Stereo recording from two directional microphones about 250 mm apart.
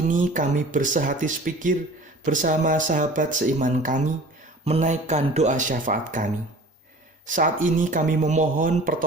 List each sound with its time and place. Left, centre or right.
0.1 s speech: right
7.3 s speech: right